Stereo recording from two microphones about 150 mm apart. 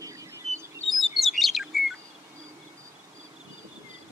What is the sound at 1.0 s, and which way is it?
Chirp, centre (ahead or behind).